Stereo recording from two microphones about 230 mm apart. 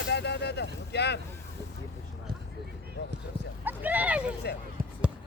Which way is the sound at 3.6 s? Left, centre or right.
Centre.